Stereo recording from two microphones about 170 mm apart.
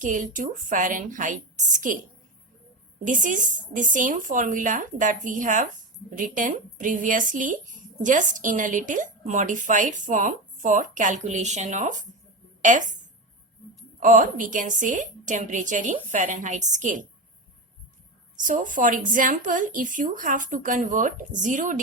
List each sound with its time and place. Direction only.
0.0 s a woman's voice: 50° right (ahead or behind)
14.0 s a woman's voice: 50° right (ahead or behind)
18.4 s a woman's voice: 50° right (ahead or behind)